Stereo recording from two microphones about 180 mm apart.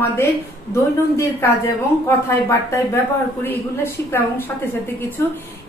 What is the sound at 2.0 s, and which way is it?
Speech, 15° left (ahead or behind).